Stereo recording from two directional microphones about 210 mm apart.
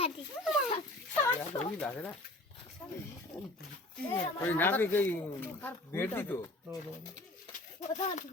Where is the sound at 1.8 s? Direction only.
5° left (ahead or behind).